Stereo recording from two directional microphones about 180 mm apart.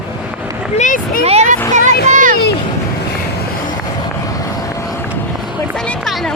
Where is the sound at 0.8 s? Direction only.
45° left (ahead or behind).